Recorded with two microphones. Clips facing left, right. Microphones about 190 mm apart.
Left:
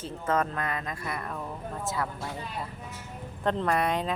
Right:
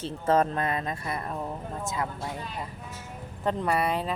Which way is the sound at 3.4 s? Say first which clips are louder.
Even; 10° right (ahead or behind).